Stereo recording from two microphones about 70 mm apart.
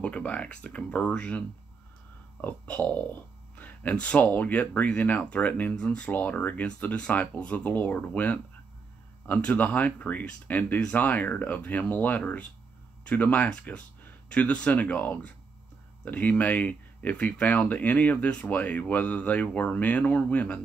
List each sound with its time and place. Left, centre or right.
0.0 s speech: left
2.4 s speech: left